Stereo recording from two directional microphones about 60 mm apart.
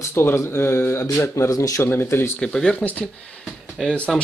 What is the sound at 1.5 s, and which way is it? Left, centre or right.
Speech, left.